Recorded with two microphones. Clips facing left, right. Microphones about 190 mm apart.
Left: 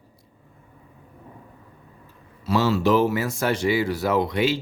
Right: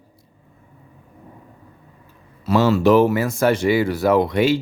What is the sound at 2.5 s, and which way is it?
Speech, 50° right (ahead or behind).